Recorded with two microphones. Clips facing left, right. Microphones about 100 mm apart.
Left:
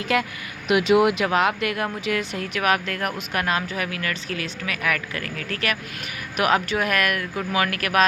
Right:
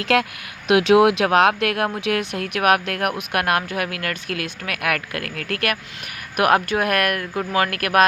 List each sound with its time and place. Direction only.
0.0 s speech: 75° right (ahead or behind); by 8.0 s 50° right (ahead or behind)